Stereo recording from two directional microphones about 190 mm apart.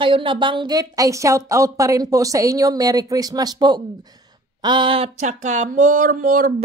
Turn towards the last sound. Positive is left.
turn(degrees=-45)  # may be behind; listen again after turning